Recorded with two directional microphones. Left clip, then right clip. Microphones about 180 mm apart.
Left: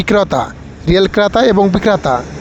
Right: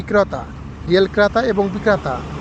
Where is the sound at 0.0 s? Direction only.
45° left (ahead or behind).